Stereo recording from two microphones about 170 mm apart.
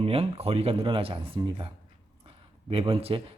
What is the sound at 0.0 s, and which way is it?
Speech, 35° right (ahead or behind).